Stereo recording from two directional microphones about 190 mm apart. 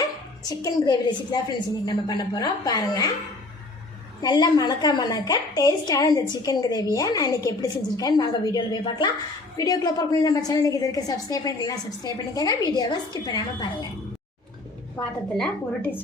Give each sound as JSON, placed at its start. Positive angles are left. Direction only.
{"t": 0.4, "sound": "a woman's voice", "side_deg": 20}
{"t": 4.2, "sound": "a woman's voice", "side_deg": 20}
{"t": 15.4, "sound": "a woman's voice", "side_deg": 10}